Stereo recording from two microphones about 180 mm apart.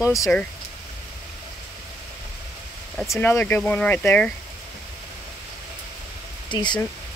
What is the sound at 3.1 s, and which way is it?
Speech, 10° left (ahead or behind).